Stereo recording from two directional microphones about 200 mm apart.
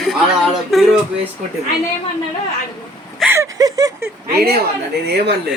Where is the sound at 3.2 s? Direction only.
10° right (ahead or behind).